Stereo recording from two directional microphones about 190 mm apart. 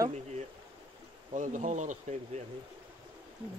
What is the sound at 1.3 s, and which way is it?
Speech, 40° right (ahead or behind).